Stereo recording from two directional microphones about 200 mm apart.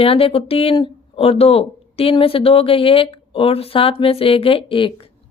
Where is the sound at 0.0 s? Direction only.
30° left (ahead or behind).